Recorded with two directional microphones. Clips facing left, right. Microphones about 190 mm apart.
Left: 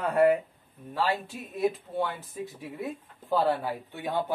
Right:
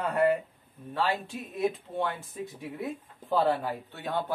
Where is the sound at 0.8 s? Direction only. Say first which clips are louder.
Left 1 dB; 5° left (ahead or behind).